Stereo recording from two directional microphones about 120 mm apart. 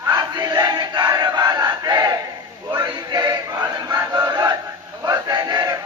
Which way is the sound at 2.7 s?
35° right (ahead or behind).